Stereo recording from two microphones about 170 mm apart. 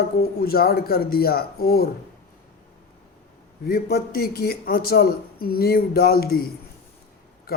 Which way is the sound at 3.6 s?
65° left (ahead or behind).